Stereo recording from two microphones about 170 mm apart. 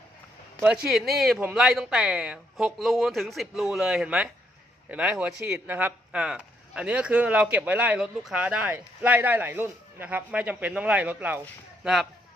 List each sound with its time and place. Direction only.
0.6 s speech: 5° right (ahead or behind)
1.4 s speech: 10° right (ahead or behind)
1.6 s speech: centre (ahead or behind)